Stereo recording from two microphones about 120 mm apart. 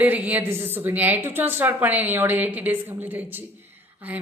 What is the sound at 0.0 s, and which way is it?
A woman's voice, 15° right (ahead or behind).